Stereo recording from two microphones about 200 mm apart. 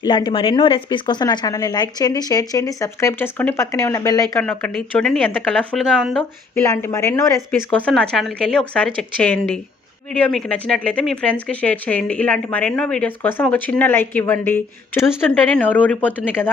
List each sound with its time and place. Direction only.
0.0 s speech: 20° left (ahead or behind)
4.4 s speech: 5° left (ahead or behind)
6.8 s speech: 15° left (ahead or behind)